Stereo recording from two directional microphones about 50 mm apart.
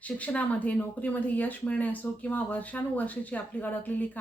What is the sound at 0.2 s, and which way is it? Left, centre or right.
Speech, left.